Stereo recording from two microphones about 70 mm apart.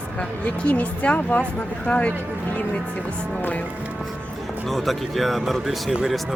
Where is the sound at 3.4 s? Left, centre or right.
Left.